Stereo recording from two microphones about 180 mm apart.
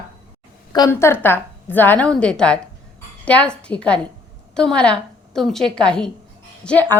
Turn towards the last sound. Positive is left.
turn(degrees=5)  # may be behind; listen again after turning